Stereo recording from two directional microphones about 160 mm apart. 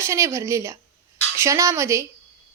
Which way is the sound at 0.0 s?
15° right (ahead or behind).